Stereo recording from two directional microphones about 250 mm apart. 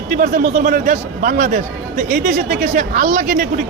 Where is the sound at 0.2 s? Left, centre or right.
Right.